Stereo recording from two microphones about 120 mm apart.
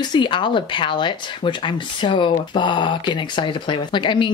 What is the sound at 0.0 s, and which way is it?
Speech, 40° left (ahead or behind).